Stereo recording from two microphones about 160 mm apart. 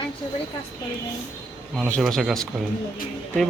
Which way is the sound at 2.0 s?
Centre (ahead or behind).